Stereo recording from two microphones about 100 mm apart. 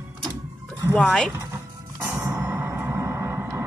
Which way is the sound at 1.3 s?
25° right (ahead or behind).